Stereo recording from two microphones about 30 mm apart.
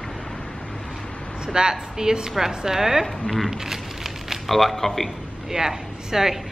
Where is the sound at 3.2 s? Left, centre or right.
Centre.